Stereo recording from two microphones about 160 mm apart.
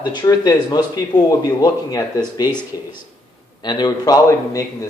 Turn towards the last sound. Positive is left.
turn(degrees=20)  # may be behind; listen again after turning